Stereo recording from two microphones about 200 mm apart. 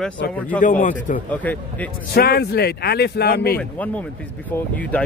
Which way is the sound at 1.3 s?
10° left (ahead or behind).